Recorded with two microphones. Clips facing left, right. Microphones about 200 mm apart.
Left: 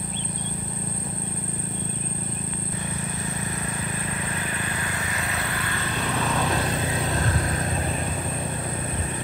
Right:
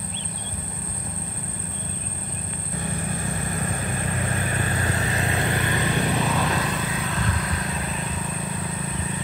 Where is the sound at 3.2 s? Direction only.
50° right (ahead or behind); by 6.0 s 20° right (ahead or behind).